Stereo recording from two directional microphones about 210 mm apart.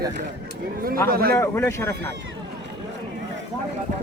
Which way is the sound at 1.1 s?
45° right (ahead or behind).